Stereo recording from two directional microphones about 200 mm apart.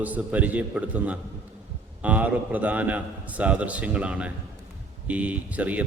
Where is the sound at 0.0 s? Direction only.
10° right (ahead or behind).